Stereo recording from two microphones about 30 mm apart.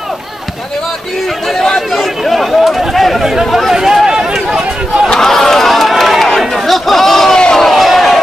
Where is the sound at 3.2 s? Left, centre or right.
Centre.